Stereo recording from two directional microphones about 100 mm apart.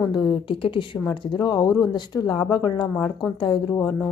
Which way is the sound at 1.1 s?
45° left (ahead or behind).